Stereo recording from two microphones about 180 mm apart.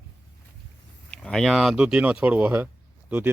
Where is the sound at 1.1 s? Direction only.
5° left (ahead or behind).